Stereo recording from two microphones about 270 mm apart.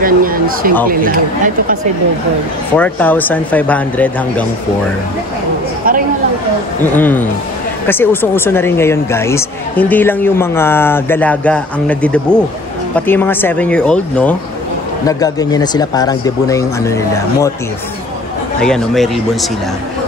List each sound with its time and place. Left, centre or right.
0.0 s speech: right
2.7 s speech: centre
6.8 s speech: centre
18.6 s speech: centre